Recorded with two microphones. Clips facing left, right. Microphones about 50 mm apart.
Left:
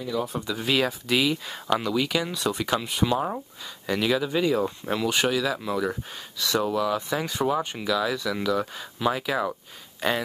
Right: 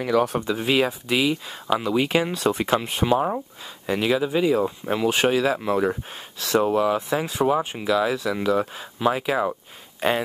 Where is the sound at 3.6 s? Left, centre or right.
Right.